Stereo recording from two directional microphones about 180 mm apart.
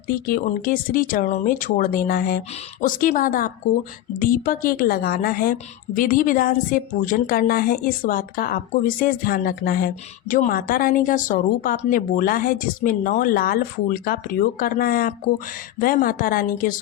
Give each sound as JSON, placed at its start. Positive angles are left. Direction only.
{"t": 0.3, "sound": "a woman's voice", "side_deg": 50}